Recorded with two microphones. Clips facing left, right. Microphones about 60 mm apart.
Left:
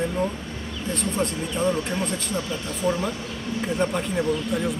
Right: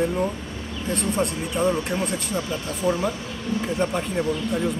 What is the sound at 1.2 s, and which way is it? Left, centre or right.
Speech, centre.